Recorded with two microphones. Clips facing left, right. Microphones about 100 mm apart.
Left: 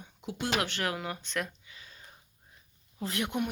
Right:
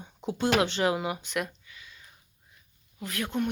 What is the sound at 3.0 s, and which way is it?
Speech, 25° left (ahead or behind).